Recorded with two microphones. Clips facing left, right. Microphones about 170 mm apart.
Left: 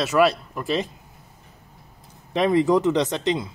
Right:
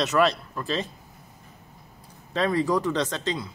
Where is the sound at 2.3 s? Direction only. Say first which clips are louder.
Left 5 dB; 20° left (ahead or behind).